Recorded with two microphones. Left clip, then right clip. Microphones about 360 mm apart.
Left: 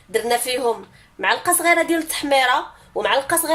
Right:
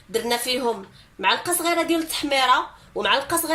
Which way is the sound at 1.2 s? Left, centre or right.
Left.